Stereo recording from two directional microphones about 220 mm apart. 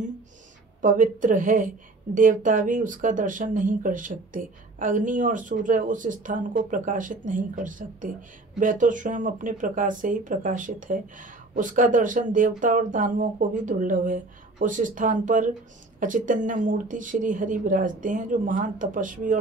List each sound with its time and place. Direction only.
0.7 s speech: 35° right (ahead or behind)